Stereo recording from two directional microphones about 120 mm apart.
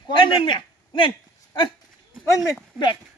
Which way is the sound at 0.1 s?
45° left (ahead or behind).